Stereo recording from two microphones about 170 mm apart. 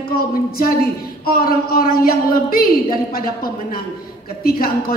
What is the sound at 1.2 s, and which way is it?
A man's voice, 60° left (ahead or behind).